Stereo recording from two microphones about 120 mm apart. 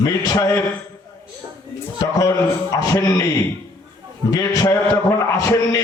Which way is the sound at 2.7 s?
30° left (ahead or behind).